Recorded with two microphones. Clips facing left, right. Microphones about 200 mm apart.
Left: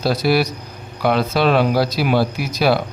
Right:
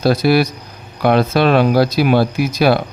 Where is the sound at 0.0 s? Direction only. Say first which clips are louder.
Right 4 dB; 55° right (ahead or behind).